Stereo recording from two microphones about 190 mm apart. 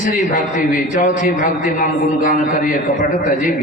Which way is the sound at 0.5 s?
45° left (ahead or behind).